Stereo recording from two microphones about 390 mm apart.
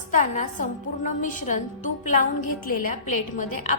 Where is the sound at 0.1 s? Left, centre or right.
Centre.